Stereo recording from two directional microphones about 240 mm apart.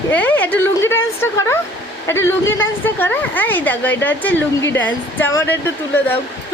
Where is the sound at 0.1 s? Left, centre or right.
Centre.